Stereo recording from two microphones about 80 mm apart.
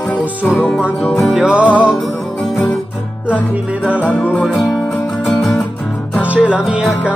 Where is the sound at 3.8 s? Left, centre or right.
Centre.